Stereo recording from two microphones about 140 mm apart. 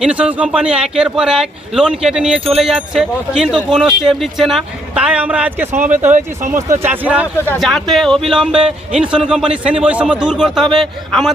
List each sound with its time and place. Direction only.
0.0 s speech: 10° right (ahead or behind)
6.1 s speech: 60° right (ahead or behind)
6.5 s speech: 20° right (ahead or behind)
7.3 s speech: 15° left (ahead or behind)
7.6 s speech: centre (ahead or behind)